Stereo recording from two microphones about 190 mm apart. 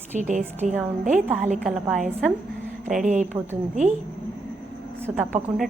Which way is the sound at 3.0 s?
40° right (ahead or behind).